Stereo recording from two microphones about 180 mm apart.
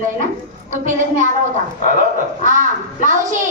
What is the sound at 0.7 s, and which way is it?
Speech, 45° right (ahead or behind).